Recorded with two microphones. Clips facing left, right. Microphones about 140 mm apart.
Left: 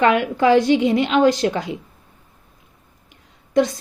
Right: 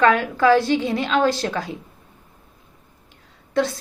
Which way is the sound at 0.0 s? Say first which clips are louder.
Left 1 dB; 20° left (ahead or behind).